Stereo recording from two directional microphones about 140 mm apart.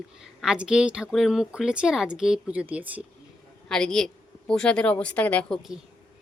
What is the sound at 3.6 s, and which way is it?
A woman's voice, 5° left (ahead or behind).